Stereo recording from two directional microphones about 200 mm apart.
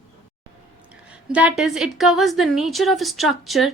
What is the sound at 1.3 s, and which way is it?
A woman's voice, 5° right (ahead or behind).